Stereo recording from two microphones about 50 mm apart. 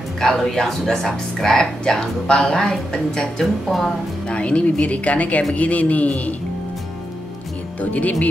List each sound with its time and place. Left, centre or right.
0.2 s speech: centre
3.6 s speech: centre
4.3 s a woman's voice: left
7.8 s speech: left